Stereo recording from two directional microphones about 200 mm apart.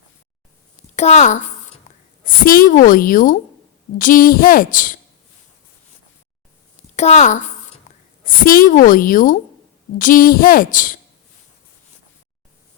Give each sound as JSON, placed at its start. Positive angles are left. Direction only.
{"t": 0.9, "sound": "a woman's voice", "side_deg": 35}
{"t": 1.9, "sound": "a sound", "side_deg": 35}
{"t": 2.2, "sound": "a woman's voice", "side_deg": 45}
{"t": 6.9, "sound": "a woman's voice", "side_deg": 35}